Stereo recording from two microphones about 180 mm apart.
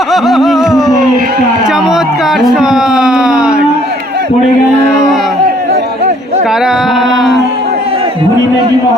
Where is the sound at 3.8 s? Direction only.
65° right (ahead or behind).